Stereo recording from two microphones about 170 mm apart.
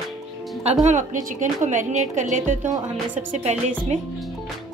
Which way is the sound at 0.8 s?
45° right (ahead or behind).